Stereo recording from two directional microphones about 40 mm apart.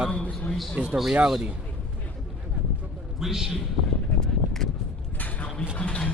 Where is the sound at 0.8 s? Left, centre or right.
Right.